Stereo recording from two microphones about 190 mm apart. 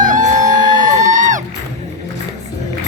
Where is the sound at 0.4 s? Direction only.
20° right (ahead or behind).